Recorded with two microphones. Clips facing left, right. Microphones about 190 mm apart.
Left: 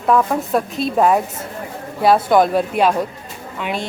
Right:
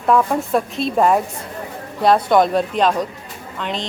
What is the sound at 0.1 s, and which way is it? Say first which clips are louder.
A woman's voice: even; centre (ahead or behind).